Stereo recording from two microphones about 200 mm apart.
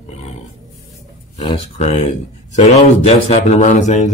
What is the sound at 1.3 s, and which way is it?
Speech, 30° left (ahead or behind).